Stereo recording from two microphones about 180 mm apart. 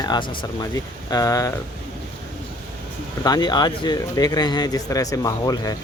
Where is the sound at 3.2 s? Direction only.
20° left (ahead or behind).